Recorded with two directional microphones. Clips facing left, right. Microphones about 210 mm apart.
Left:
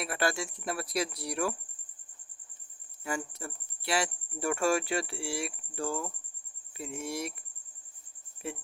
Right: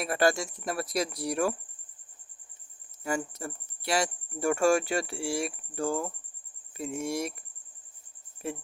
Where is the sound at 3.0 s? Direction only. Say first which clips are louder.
Right 4 dB; 40° right (ahead or behind).